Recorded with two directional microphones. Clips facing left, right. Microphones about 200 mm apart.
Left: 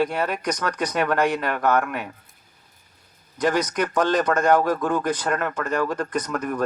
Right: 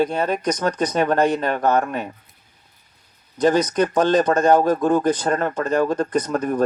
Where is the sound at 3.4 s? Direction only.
25° right (ahead or behind).